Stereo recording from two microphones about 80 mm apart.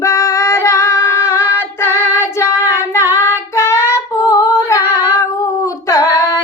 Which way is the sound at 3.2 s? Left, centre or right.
Left.